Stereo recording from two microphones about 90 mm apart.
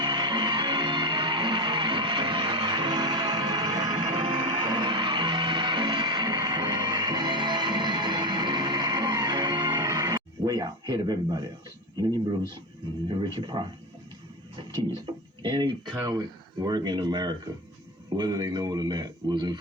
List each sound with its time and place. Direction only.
0.0 s music: 60° right (ahead or behind); by 10.2 s 40° right (ahead or behind)
10.2 s speech: 45° right (ahead or behind)
13.1 s speech: 60° right (ahead or behind)
15.4 s speech: 60° right (ahead or behind)
16.0 s a man's voice: 50° right (ahead or behind)